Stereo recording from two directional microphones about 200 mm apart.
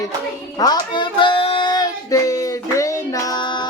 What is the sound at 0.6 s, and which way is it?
Child singing, 20° left (ahead or behind).